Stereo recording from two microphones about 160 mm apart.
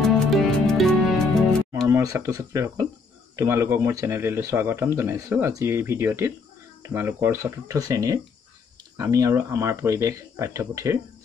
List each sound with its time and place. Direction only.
0.0 s music: centre (ahead or behind)
1.9 s speech: 20° right (ahead or behind)